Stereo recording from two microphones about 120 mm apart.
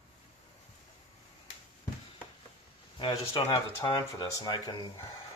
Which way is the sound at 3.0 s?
45° left (ahead or behind).